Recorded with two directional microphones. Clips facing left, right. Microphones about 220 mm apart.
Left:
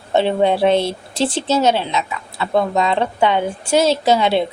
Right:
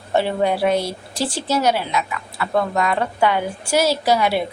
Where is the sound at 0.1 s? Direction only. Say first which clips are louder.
Left 3 dB; 20° left (ahead or behind).